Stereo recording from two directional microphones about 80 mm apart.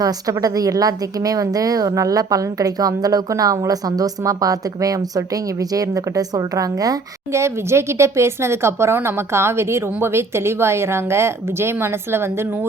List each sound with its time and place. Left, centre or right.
0.0 s a woman's voice: right
7.3 s speech: right